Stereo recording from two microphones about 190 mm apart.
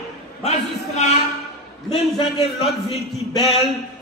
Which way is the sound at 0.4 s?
35° left (ahead or behind).